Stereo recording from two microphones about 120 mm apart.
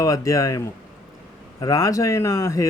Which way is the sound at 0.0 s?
30° left (ahead or behind).